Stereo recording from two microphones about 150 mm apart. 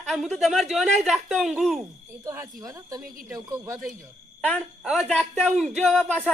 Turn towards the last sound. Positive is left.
turn(degrees=10)  # may be behind; listen again after turning